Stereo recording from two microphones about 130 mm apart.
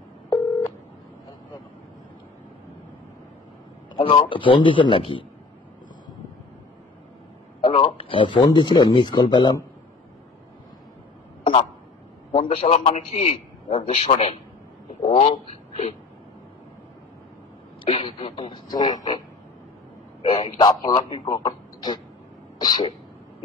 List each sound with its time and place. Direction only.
4.0 s a man's voice: 40° left (ahead or behind)
7.6 s speech: 45° left (ahead or behind)
12.3 s a man's voice: 50° left (ahead or behind)
17.8 s a man's voice: 50° left (ahead or behind)
18.4 s a man's voice: 30° left (ahead or behind)